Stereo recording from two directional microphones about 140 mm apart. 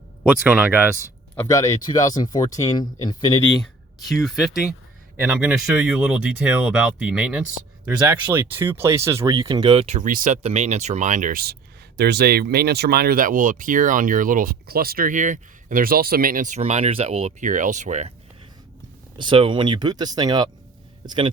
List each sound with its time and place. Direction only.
0.2 s speech: 10° right (ahead or behind)
1.4 s speech: 20° left (ahead or behind)
3.6 s speech: centre (ahead or behind); by 10.1 s 50° right (ahead or behind)
10.1 s speech: 70° right (ahead or behind); by 17.5 s 50° right (ahead or behind)
17.5 s speech: 65° right (ahead or behind)
19.1 s speech: 35° right (ahead or behind)